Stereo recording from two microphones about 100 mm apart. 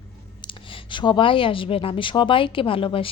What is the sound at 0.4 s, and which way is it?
A woman's voice, 55° left (ahead or behind).